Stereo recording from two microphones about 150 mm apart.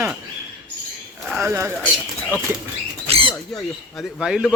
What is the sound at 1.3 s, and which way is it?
Speech, 10° right (ahead or behind).